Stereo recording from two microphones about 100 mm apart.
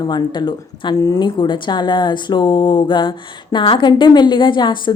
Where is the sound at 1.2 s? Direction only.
50° left (ahead or behind).